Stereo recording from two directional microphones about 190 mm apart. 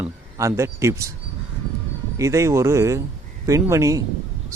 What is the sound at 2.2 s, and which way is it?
A man's voice, 15° right (ahead or behind).